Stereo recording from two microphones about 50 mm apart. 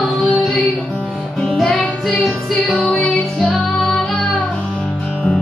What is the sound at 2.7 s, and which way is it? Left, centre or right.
Music, left.